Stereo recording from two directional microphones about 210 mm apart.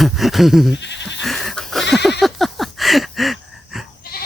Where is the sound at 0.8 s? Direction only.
55° left (ahead or behind).